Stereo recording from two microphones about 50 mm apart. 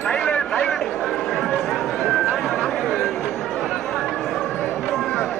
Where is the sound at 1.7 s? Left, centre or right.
Centre.